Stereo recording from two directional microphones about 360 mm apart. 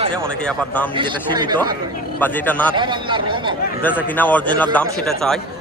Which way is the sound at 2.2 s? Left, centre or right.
Centre.